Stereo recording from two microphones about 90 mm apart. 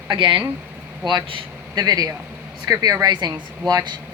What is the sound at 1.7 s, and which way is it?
Speech, 45° right (ahead or behind).